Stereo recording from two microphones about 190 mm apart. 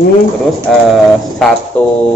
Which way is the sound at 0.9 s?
Centre (ahead or behind).